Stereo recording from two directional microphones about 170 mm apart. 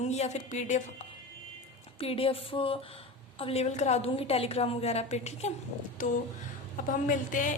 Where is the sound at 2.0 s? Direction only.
35° left (ahead or behind).